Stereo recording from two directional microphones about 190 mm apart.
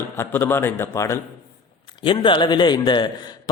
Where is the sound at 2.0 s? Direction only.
25° left (ahead or behind).